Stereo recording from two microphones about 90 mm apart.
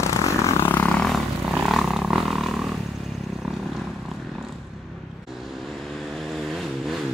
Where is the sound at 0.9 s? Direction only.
5° left (ahead or behind).